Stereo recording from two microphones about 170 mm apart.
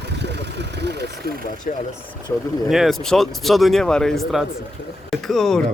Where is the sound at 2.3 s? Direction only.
10° left (ahead or behind).